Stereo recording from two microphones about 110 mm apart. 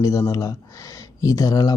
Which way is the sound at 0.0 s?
30° left (ahead or behind).